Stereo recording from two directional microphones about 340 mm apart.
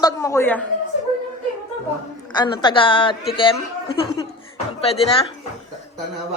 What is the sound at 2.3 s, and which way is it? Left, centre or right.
A woman's voice, centre.